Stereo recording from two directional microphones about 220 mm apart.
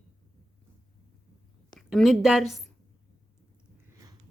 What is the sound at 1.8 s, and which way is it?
Speech, centre (ahead or behind).